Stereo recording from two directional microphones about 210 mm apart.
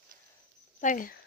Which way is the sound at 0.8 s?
40° left (ahead or behind).